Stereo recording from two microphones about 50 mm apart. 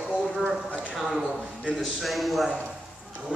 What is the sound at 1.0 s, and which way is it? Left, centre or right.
A man's voice, centre.